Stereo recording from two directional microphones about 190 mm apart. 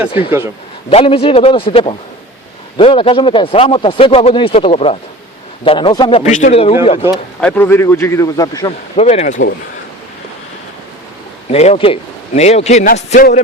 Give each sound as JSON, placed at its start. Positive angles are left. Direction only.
{"t": 0.2, "sound": "a man's voice", "side_deg": -10}
{"t": 0.9, "sound": "a man's voice", "side_deg": 30}
{"t": 7.1, "sound": "a man's voice", "side_deg": 5}
{"t": 9.0, "sound": "a man's voice", "side_deg": 35}
{"t": 11.4, "sound": "a man's voice", "side_deg": 35}